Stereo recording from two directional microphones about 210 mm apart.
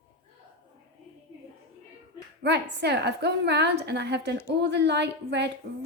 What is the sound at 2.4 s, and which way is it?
A woman's voice, 55° right (ahead or behind).